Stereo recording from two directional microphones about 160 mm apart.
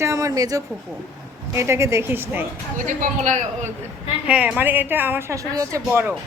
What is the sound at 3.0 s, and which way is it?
Speech, 50° right (ahead or behind).